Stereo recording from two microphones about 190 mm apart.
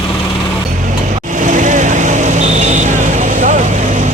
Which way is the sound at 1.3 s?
40° right (ahead or behind).